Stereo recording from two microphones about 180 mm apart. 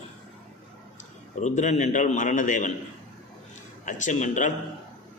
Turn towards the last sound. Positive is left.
turn(degrees=45)  # may be behind; listen again after turning